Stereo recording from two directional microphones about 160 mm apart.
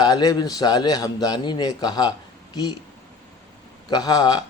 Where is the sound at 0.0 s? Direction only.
25° left (ahead or behind).